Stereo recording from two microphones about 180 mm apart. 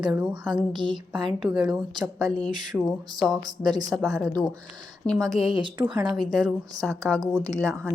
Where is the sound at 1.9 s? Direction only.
20° right (ahead or behind).